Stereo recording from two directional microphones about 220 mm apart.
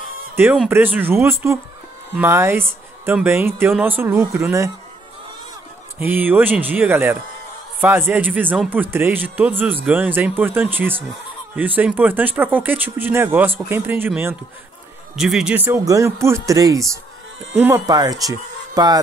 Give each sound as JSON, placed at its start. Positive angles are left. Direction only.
{"t": 0.4, "sound": "a man's voice", "side_deg": -10}
{"t": 5.9, "sound": "a man's voice", "side_deg": -10}